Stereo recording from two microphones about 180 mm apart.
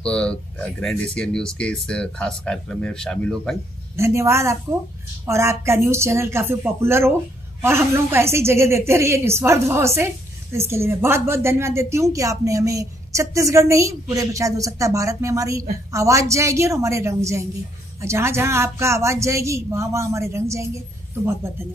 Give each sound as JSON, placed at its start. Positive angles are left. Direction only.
{"t": 0.0, "sound": "speech", "side_deg": 5}
{"t": 3.9, "sound": "a woman's voice", "side_deg": -15}